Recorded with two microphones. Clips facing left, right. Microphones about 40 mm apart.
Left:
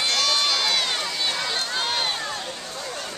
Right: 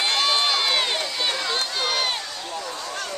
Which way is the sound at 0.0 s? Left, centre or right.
Centre.